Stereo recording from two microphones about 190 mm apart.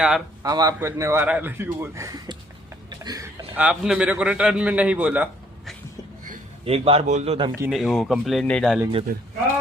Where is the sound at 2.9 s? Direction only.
20° right (ahead or behind).